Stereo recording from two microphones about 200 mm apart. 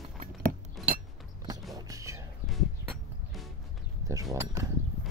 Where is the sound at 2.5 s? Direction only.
Centre (ahead or behind).